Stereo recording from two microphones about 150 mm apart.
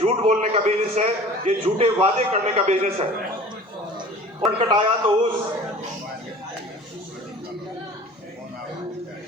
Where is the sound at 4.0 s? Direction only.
35° right (ahead or behind).